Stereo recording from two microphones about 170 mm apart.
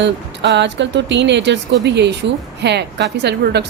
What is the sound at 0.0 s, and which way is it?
Speech, 90° right.